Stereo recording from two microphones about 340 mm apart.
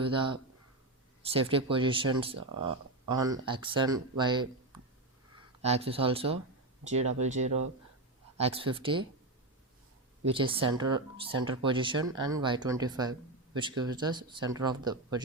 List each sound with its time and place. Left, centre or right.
0.0 s speech: centre
5.6 s speech: centre
10.3 s speech: centre